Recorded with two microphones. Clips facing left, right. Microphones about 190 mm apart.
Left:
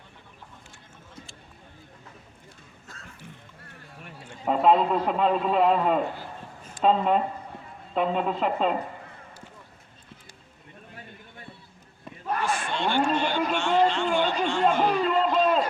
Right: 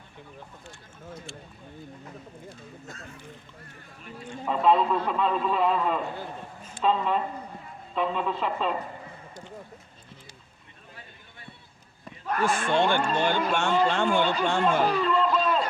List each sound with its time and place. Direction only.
4.4 s a man's voice: 50° left (ahead or behind)
12.5 s a man's voice: 50° right (ahead or behind)
14.8 s a sound: 45° left (ahead or behind)